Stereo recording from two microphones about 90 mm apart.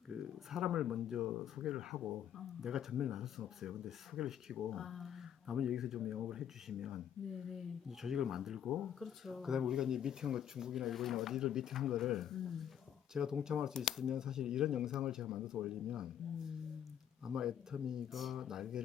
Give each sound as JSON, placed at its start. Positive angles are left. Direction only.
{"t": 0.1, "sound": "speech", "side_deg": -5}
{"t": 17.2, "sound": "speech", "side_deg": -5}